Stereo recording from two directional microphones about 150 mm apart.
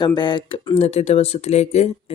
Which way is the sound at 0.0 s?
30° left (ahead or behind).